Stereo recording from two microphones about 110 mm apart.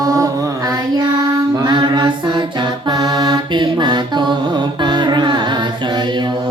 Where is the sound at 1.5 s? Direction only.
35° right (ahead or behind).